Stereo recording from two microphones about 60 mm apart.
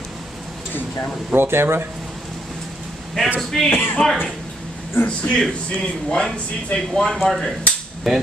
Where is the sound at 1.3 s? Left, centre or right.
Right.